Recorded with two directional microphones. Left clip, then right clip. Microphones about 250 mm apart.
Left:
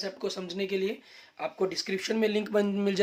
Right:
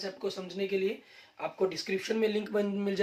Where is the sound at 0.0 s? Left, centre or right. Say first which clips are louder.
Left 2 dB; left.